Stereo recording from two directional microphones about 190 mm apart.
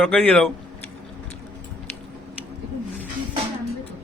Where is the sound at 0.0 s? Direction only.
10° left (ahead or behind).